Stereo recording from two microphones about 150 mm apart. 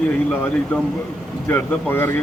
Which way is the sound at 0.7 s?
10° left (ahead or behind).